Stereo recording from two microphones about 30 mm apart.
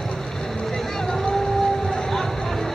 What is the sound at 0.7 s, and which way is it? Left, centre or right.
Vehicle, centre.